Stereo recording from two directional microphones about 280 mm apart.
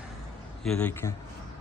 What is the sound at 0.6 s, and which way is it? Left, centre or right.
Speech, centre.